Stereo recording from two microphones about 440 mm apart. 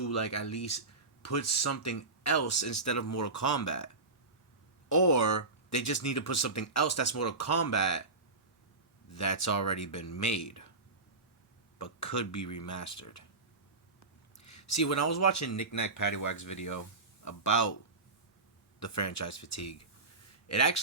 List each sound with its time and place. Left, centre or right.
0.0 s speech: left
4.9 s speech: left
9.1 s speech: left
11.8 s speech: left
14.3 s speech: left
18.8 s speech: left